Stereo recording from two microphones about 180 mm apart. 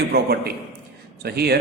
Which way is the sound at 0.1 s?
60° right (ahead or behind).